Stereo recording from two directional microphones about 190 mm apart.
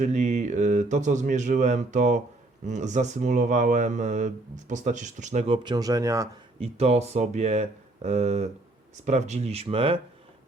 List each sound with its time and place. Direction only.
0.0 s speech: 40° right (ahead or behind)
5.6 s speech: 20° right (ahead or behind)
6.6 s speech: 35° right (ahead or behind)